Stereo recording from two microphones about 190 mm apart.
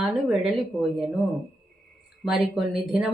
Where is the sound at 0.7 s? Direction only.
Centre (ahead or behind).